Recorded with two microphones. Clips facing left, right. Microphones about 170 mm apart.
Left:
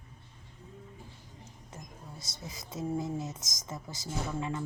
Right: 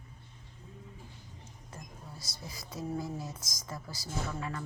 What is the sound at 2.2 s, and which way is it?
A woman's voice, 20° left (ahead or behind).